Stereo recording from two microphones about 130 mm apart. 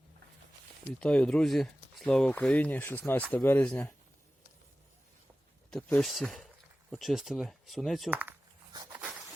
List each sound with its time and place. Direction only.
0.9 s speech: 10° left (ahead or behind)
5.7 s speech: 5° left (ahead or behind)
8.1 s a sound: 15° right (ahead or behind)